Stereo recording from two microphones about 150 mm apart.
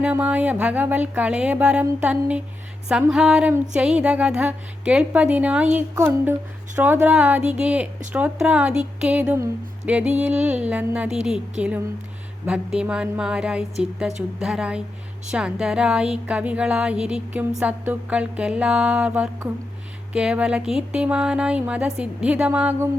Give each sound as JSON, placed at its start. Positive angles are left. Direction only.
{"t": 0.0, "sound": "speech", "side_deg": -10}